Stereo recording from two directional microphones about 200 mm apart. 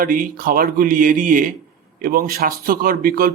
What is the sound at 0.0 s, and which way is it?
A man's voice, 45° right (ahead or behind).